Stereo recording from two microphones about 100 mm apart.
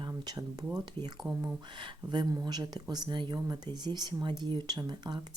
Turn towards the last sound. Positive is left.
turn(degrees=-45)  # may be behind; listen again after turning